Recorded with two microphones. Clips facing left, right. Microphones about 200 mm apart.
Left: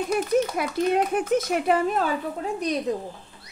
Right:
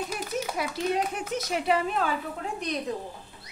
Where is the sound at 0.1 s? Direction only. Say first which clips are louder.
Left 9 dB; 55° left (ahead or behind).